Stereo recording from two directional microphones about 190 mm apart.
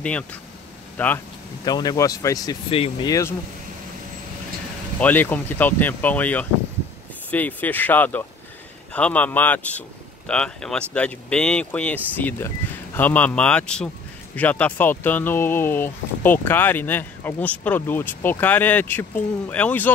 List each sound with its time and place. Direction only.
0.0 s speech: 5° left (ahead or behind)
1.6 s speech: 20° left (ahead or behind)
2.7 s speech: 30° left (ahead or behind)
3.1 s speech: 15° left (ahead or behind)
5.0 s speech: 10° left (ahead or behind)